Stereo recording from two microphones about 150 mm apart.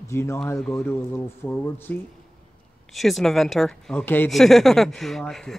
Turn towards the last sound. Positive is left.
turn(degrees=5)  # may be behind; listen again after turning